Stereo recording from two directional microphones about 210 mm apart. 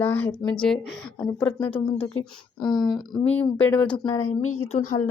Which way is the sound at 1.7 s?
25° left (ahead or behind).